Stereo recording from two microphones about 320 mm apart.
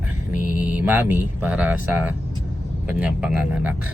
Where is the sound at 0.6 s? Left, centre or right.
Centre.